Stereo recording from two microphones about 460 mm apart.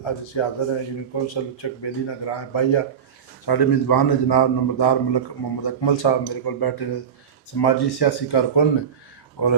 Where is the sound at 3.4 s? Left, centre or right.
Left.